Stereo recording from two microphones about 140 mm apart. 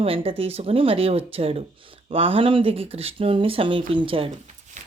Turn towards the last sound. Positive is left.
turn(degrees=-40)  # may be behind; listen again after turning